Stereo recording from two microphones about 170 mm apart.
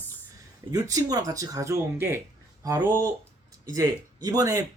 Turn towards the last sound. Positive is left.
turn(degrees=-20)  # may be behind; listen again after turning